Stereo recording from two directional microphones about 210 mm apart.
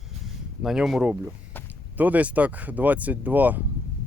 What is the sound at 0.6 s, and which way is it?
Speech, centre (ahead or behind).